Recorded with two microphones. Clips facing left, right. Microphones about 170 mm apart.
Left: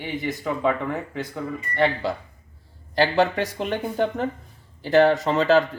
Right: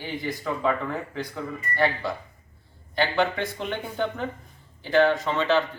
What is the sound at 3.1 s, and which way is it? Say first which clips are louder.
Speech: left 4 dB; 40° left (ahead or behind).